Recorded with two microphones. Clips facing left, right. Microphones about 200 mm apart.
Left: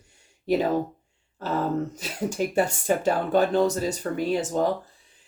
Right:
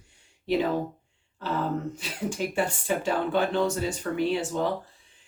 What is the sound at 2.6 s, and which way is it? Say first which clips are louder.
Speech: left 5 dB; 45° left (ahead or behind).